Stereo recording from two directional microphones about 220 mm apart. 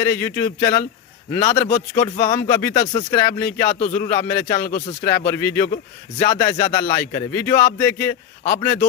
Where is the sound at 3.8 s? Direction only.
35° left (ahead or behind).